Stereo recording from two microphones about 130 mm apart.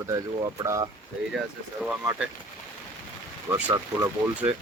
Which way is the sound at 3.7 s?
30° right (ahead or behind).